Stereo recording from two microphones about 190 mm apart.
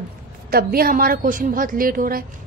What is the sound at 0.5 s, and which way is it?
A woman's voice, 50° right (ahead or behind).